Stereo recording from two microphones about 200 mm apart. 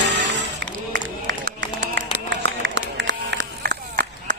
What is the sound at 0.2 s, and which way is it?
Music, 65° right (ahead or behind).